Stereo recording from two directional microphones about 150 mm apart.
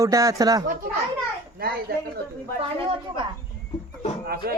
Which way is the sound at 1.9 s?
90° right.